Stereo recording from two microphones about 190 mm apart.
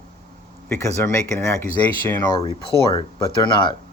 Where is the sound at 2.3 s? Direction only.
25° left (ahead or behind).